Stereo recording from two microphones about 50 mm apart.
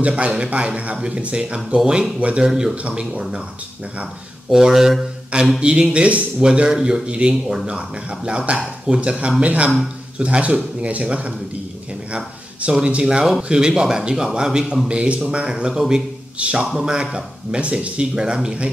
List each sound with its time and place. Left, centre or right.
0.0 s speech: right
2.4 s speech: centre
4.5 s speech: centre